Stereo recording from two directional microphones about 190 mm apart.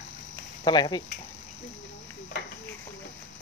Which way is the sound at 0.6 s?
25° left (ahead or behind).